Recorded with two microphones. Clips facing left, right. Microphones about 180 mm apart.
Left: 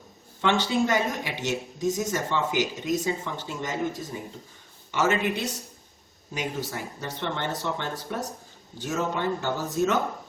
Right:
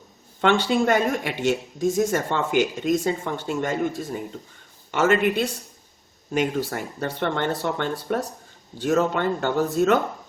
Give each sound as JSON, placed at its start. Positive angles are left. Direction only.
{"t": 0.4, "sound": "speech", "side_deg": -60}